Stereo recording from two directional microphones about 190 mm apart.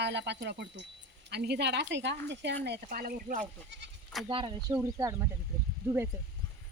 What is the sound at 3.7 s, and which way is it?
Speech, 65° right (ahead or behind).